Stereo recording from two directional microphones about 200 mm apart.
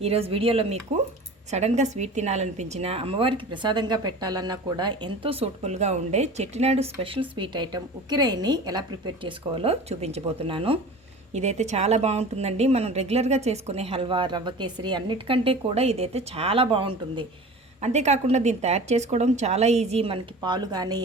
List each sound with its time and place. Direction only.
0.0 s a woman's voice: 30° right (ahead or behind)